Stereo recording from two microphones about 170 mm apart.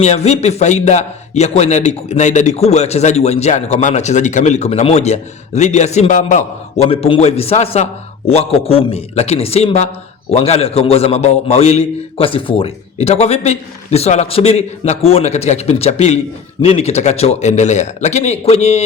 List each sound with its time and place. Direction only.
0.0 s a man's voice: 40° left (ahead or behind)